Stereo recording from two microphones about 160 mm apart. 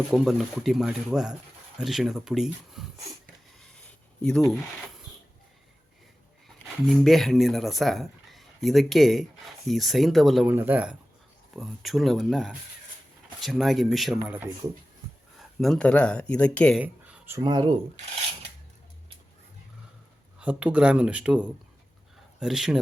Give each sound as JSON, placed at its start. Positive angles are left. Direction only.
{"t": 0.1, "sound": "speech", "side_deg": 0}
{"t": 4.2, "sound": "speech", "side_deg": 5}
{"t": 6.8, "sound": "speech", "side_deg": 0}
{"t": 10.5, "sound": "speech", "side_deg": -10}
{"t": 14.3, "sound": "speech", "side_deg": -10}
{"t": 15.4, "sound": "speech", "side_deg": 0}
{"t": 16.8, "sound": "a sound", "side_deg": -10}
{"t": 17.4, "sound": "speech", "side_deg": -30}
{"t": 20.4, "sound": "speech", "side_deg": -10}